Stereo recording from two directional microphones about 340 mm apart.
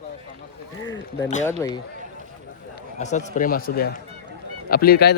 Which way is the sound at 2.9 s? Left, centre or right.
Left.